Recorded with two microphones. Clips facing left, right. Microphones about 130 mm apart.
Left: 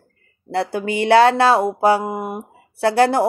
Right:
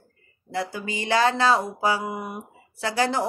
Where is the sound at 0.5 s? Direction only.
65° left (ahead or behind).